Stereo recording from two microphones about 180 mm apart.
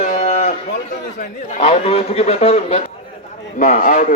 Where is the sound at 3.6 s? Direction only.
45° left (ahead or behind).